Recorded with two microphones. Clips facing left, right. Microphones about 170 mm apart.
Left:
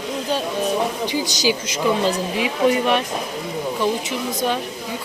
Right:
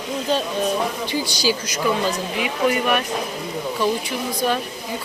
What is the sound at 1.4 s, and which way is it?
Speech, 20° left (ahead or behind).